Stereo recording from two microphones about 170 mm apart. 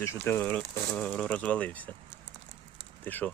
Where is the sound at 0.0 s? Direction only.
15° left (ahead or behind).